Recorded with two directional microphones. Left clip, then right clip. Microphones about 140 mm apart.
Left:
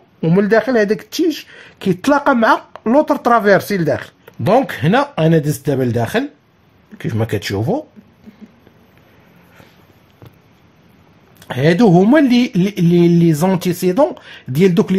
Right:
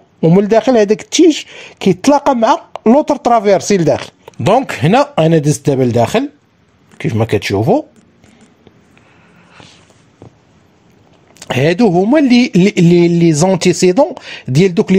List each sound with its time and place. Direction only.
0.4 s speech: 30° right (ahead or behind)
11.3 s speech: 50° right (ahead or behind)
11.9 s speech: 35° right (ahead or behind)